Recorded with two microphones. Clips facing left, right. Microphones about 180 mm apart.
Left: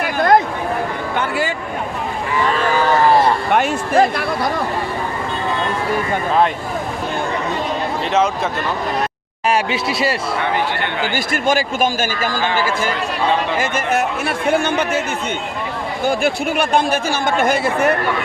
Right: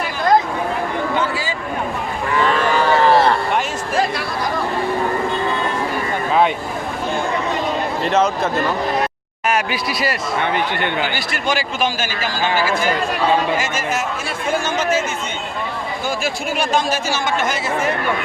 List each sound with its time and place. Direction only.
0.0 s a sound: 55° left (ahead or behind)
3.5 s a sound: 55° left (ahead or behind)
8.0 s speech: centre (ahead or behind)
9.5 s speech: 30° left (ahead or behind)
11.1 s speech: 50° left (ahead or behind)
13.6 s speech: 60° left (ahead or behind)
16.0 s speech: 60° left (ahead or behind)